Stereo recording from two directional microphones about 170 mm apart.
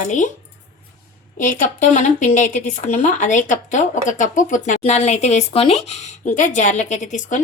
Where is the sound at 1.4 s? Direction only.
50° left (ahead or behind).